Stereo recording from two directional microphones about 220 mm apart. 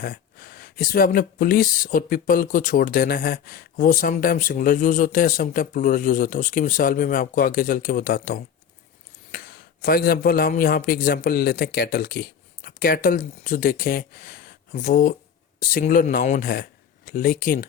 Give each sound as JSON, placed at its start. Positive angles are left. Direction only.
{"t": 0.0, "sound": "speech", "side_deg": 45}